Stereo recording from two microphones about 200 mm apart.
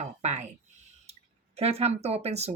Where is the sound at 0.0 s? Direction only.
35° right (ahead or behind).